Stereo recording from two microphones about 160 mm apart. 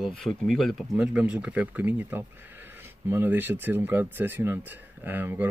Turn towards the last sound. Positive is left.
turn(degrees=-10)  # may be behind; listen again after turning